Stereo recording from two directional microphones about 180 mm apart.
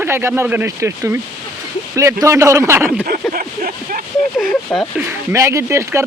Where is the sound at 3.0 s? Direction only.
55° right (ahead or behind).